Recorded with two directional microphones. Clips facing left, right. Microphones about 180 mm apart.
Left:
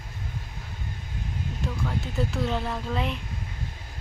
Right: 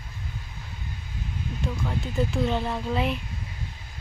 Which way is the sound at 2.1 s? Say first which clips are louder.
Right 3 dB; centre (ahead or behind).